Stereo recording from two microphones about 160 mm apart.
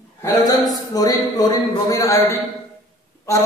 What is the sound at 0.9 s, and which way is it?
A man's voice, 25° left (ahead or behind).